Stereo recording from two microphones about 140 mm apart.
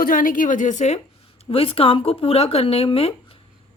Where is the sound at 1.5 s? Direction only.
40° left (ahead or behind).